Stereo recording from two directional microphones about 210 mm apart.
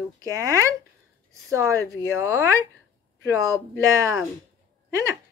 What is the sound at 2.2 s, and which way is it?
Speech, 15° right (ahead or behind).